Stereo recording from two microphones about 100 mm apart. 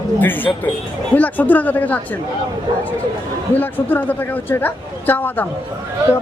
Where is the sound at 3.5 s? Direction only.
20° left (ahead or behind).